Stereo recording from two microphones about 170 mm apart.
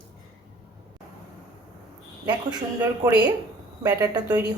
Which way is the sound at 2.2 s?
25° right (ahead or behind).